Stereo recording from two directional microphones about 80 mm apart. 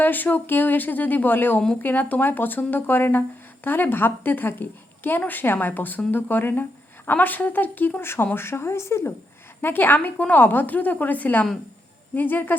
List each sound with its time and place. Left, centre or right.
0.0 s speech: left
9.6 s speech: left